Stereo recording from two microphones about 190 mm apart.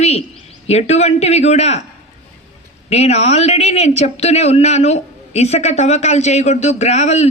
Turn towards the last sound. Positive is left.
turn(degrees=35)  # may be behind; listen again after turning